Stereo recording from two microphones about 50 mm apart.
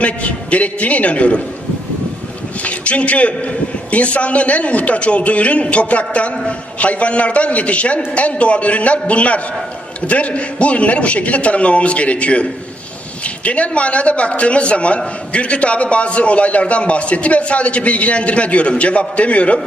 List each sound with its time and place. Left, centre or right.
0.0 s a man's voice: left
2.6 s a man's voice: left